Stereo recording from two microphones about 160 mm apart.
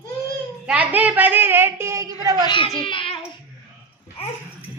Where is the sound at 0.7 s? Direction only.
10° right (ahead or behind).